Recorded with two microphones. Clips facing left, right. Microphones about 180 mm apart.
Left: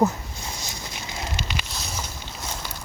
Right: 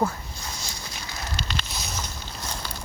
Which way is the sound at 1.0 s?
20° left (ahead or behind).